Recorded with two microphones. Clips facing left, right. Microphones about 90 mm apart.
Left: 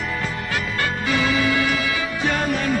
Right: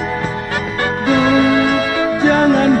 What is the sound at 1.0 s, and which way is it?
Music, 45° right (ahead or behind).